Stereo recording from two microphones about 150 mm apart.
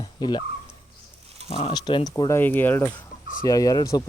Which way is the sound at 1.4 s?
40° left (ahead or behind).